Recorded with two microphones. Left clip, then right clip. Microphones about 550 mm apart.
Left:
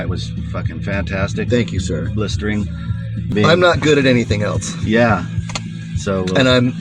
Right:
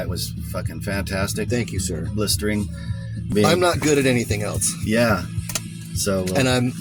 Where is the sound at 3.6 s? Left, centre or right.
Right.